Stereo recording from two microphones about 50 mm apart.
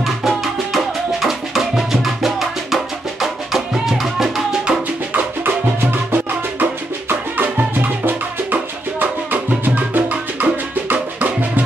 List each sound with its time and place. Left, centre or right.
0.0 s music: centre
5.1 s music: right